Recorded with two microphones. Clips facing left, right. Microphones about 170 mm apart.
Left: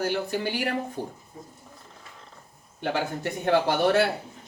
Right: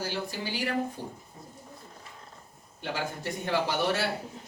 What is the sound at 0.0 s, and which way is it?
Speech, 60° left (ahead or behind).